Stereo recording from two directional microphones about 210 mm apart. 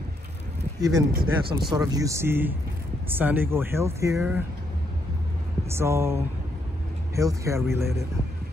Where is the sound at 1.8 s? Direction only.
15° right (ahead or behind).